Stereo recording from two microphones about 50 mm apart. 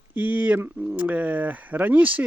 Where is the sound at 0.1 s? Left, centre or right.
Right.